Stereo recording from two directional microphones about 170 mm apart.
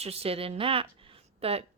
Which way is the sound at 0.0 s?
35° right (ahead or behind).